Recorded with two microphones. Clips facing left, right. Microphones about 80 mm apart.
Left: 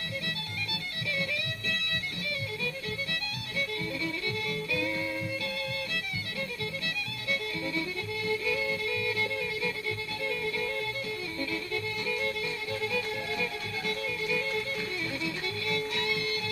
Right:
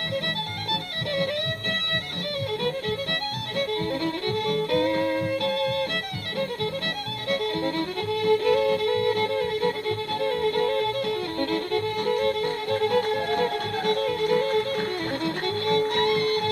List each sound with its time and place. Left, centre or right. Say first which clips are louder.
3.5 s violin: right 8 dB; right
7.2 s music: right 9 dB; right